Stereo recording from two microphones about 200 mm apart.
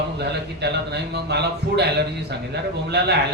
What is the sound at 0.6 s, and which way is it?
Speech, 55° right (ahead or behind).